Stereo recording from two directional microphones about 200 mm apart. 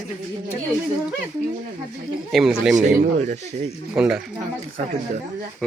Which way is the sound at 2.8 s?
35° right (ahead or behind).